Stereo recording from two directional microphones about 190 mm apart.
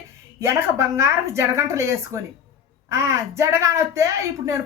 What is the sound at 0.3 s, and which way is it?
A woman's voice, 15° right (ahead or behind).